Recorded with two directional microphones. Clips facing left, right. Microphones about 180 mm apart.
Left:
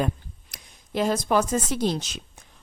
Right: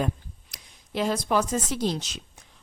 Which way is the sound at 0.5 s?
45° left (ahead or behind).